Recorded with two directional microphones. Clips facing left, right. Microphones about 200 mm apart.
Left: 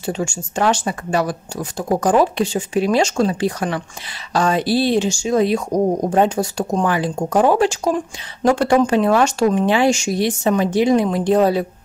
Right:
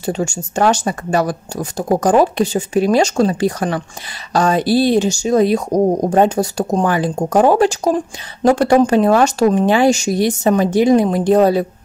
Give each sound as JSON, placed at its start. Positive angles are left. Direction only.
{"t": 0.0, "sound": "speech", "side_deg": -40}